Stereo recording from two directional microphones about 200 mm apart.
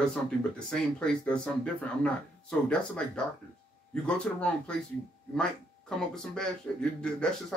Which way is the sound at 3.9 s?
5° left (ahead or behind).